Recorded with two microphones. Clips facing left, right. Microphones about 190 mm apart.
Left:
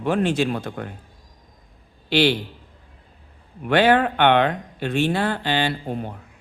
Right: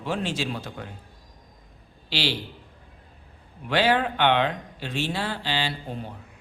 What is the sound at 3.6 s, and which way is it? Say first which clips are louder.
Speech: left 5 dB; 55° left (ahead or behind).